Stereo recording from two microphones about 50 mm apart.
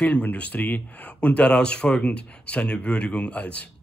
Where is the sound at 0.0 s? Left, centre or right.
Left.